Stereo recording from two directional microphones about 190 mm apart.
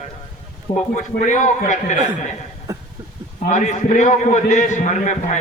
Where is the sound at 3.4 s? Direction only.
40° left (ahead or behind).